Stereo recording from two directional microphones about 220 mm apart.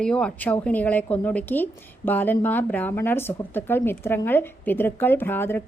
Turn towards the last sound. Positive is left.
turn(degrees=10)  # may be behind; listen again after turning